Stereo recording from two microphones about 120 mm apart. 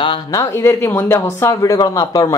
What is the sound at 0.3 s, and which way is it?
Speech, 25° left (ahead or behind).